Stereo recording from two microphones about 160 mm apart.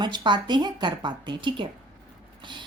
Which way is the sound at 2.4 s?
30° right (ahead or behind).